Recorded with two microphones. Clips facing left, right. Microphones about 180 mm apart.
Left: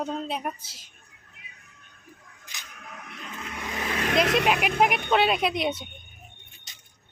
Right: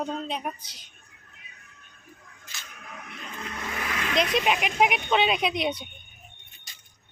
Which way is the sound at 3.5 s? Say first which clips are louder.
Left 1 dB; 15° left (ahead or behind).